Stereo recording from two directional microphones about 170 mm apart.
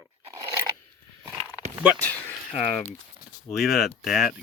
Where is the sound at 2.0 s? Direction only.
10° left (ahead or behind).